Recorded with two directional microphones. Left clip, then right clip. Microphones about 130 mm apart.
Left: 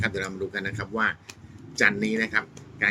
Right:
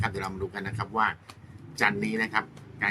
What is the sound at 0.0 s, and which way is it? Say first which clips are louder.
A man's voice: left 3 dB; 20° right (ahead or behind).